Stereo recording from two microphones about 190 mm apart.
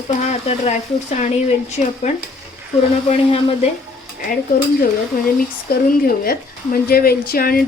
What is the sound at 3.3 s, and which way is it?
Speech, 30° left (ahead or behind).